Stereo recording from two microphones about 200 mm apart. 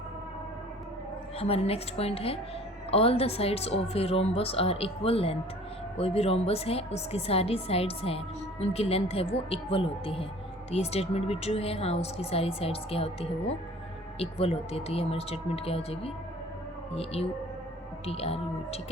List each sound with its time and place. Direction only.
1.4 s a woman's voice: 30° left (ahead or behind)